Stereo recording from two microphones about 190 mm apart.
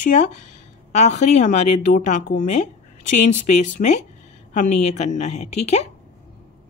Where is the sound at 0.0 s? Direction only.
40° left (ahead or behind).